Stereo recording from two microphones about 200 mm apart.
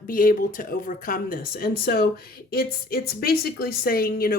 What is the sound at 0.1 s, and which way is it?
A woman's voice, 45° left (ahead or behind).